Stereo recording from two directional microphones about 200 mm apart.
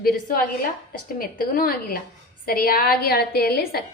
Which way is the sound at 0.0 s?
45° left (ahead or behind).